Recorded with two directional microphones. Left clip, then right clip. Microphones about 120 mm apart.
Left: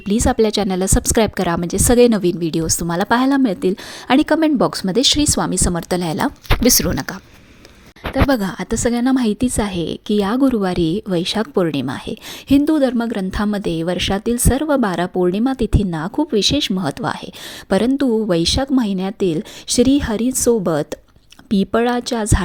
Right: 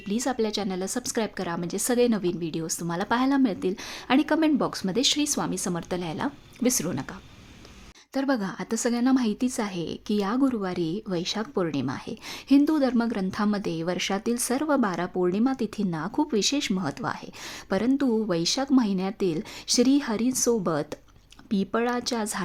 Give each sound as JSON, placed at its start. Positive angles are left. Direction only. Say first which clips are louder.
{"t": 0.0, "sound": "a woman's voice", "louder": "left 11 dB", "side_deg": 60}